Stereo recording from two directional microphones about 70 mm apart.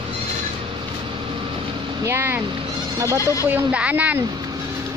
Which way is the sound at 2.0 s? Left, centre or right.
Right.